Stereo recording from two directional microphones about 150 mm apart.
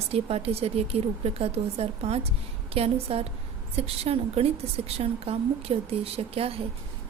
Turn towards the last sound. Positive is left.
turn(degrees=-40)  # may be behind; listen again after turning